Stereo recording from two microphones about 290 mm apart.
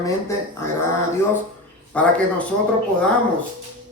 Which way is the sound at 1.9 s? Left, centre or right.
Centre.